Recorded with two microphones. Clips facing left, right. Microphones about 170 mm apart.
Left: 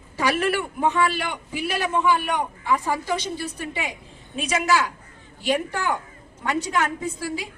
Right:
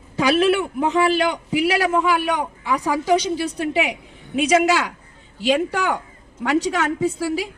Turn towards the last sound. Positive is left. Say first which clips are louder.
# right 7 dB
turn(degrees=-75)  # may be behind; listen again after turning